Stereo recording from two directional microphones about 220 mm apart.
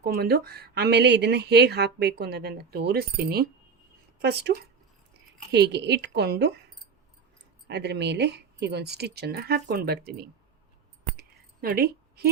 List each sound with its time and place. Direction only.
0.0 s speech: 45° right (ahead or behind)
7.7 s speech: 50° right (ahead or behind)
11.2 s a sound: 45° right (ahead or behind)